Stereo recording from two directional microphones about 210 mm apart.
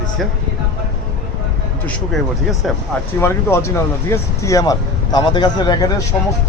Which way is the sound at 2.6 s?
Centre (ahead or behind).